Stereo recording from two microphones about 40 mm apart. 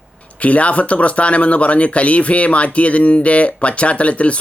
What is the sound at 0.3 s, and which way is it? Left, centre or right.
Speech, left.